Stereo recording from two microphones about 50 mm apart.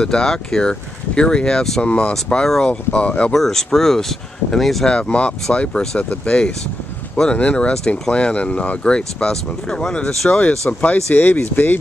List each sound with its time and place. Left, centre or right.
0.0 s speech: centre
1.8 s speech: left
3.3 s speech: centre
4.8 s speech: centre
10.7 s speech: left